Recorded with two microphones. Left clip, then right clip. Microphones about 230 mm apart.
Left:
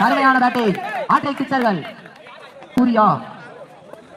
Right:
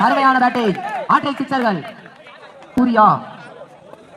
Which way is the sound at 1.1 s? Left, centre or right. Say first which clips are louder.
Right 1 dB; right.